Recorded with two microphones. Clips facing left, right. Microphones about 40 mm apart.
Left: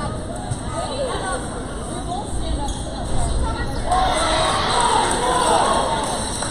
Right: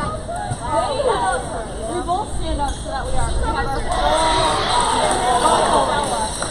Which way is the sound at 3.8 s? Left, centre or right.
Centre.